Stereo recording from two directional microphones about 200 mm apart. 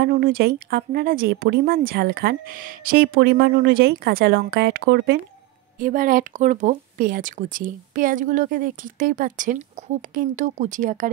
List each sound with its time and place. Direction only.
0.0 s speech: 50° right (ahead or behind)
5.8 s speech: 45° right (ahead or behind)